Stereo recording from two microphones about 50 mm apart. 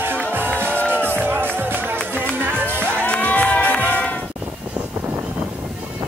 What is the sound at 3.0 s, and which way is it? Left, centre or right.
Music, left.